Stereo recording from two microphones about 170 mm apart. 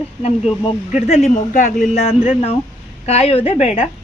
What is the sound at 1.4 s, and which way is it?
Speech, 50° left (ahead or behind).